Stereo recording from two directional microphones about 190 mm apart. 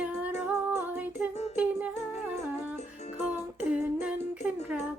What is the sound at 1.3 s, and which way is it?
Humming, 35° left (ahead or behind).